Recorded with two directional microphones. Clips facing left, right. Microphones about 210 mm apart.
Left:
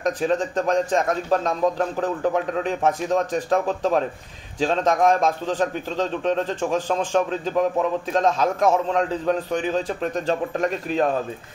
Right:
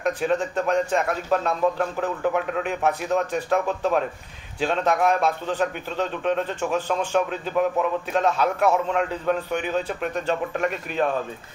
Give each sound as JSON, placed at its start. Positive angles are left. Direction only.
{"t": 0.0, "sound": "a man's voice", "side_deg": 35}